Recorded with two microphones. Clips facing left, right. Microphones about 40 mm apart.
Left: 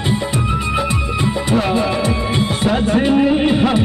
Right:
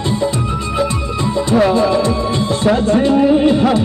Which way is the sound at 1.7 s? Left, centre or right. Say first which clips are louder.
Right 4 dB; left.